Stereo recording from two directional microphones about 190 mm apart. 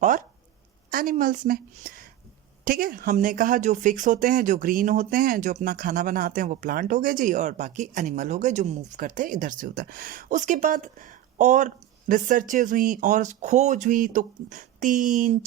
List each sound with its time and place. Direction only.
0.0 s speech: 45° right (ahead or behind)